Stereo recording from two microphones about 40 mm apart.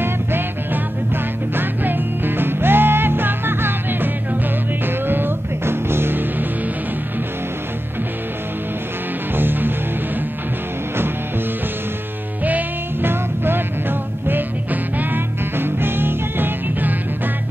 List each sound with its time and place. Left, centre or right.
1.1 s music: right
9.4 s music: right
13.0 s music: right